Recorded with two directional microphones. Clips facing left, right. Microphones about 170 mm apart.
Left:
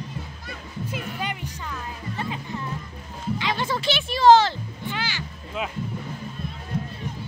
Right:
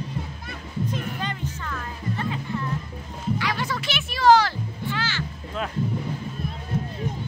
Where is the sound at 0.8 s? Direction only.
10° left (ahead or behind).